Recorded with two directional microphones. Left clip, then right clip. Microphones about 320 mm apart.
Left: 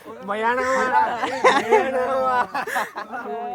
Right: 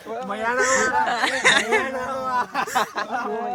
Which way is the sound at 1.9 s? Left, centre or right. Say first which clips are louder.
Left 5 dB; left.